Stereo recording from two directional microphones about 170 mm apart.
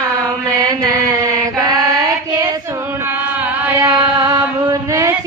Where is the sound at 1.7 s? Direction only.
20° right (ahead or behind).